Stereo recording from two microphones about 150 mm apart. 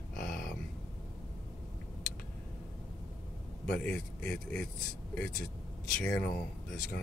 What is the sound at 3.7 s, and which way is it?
Speech, 5° left (ahead or behind).